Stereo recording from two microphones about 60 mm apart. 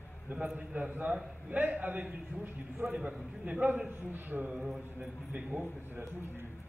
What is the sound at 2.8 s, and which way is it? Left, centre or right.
A man's voice, centre.